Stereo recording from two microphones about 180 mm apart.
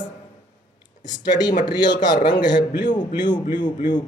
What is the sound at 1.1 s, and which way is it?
A man's voice, 20° left (ahead or behind).